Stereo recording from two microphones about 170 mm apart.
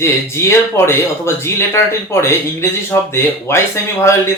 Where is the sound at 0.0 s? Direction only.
15° left (ahead or behind).